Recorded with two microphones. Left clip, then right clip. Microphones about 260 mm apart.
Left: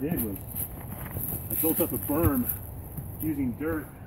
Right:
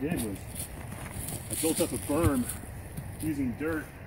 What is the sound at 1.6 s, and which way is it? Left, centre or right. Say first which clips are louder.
Speech: left 1 dB; centre.